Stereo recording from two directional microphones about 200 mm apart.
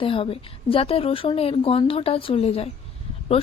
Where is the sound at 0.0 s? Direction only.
25° left (ahead or behind).